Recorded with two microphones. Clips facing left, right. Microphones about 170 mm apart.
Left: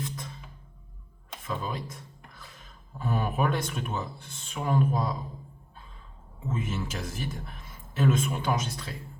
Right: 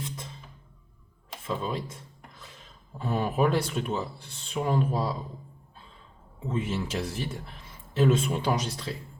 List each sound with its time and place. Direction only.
1.5 s speech: 25° right (ahead or behind)
6.5 s a man's voice: 30° right (ahead or behind)